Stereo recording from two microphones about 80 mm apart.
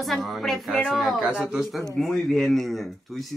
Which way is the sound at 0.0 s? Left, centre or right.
Centre.